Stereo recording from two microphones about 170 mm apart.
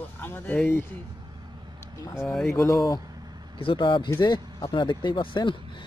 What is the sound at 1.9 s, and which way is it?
Speech, 20° left (ahead or behind).